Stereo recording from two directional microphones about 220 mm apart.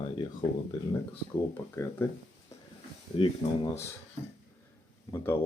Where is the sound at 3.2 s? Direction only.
25° left (ahead or behind).